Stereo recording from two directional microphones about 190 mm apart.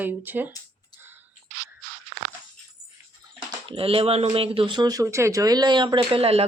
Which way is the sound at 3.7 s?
30° right (ahead or behind).